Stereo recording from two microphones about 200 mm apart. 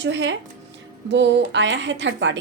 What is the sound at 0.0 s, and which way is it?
A woman's voice, 65° right (ahead or behind).